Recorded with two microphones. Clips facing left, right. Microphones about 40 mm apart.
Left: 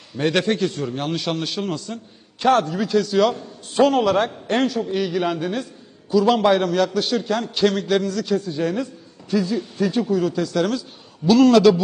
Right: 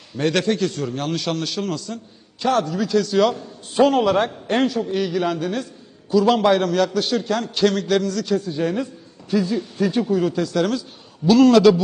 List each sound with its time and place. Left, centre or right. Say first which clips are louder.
0.2 s a man's voice: even; centre
0.6 s a man's voice: even; centre
2.4 s a man's voice: left 3 dB; left
2.7 s a man's voice: even; left
3.0 s a man's voice: even; centre
9.9 s speech: right 1 dB; centre
10.3 s a man's voice: right 1 dB; centre